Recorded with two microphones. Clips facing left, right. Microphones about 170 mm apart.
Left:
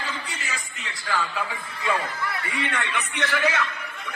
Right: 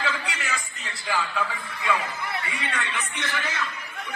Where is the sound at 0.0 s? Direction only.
65° right (ahead or behind).